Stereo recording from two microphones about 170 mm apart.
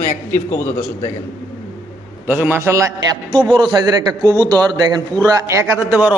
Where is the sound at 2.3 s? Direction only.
10° right (ahead or behind).